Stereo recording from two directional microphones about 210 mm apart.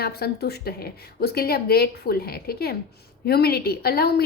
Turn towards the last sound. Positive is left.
turn(degrees=50)  # may be behind; listen again after turning